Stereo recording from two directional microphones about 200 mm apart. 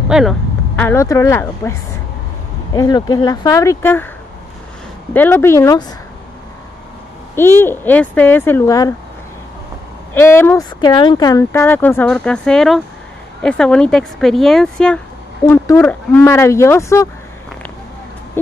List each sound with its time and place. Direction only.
0.1 s vehicle: centre (ahead or behind)
0.8 s speech: 15° left (ahead or behind)
5.1 s speech: 10° left (ahead or behind)
7.3 s speech: 10° left (ahead or behind)
10.1 s speech: 10° left (ahead or behind)
15.4 s speech: 15° left (ahead or behind)